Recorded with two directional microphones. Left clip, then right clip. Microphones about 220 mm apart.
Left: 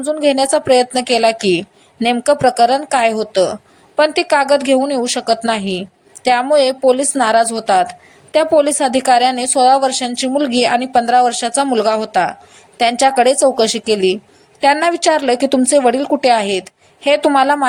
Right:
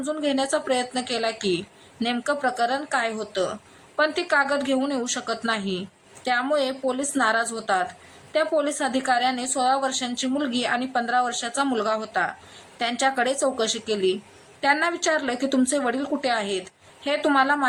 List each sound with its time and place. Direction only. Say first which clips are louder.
0.0 s a woman's voice: left 11 dB; 25° left (ahead or behind)